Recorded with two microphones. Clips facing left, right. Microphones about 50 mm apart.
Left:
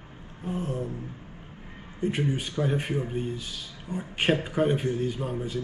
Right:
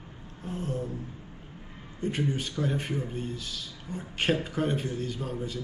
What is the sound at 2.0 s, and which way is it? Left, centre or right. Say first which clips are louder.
A man's voice: left 2 dB; centre.